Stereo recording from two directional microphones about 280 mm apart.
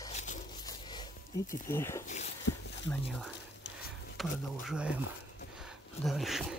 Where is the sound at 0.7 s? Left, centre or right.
Centre.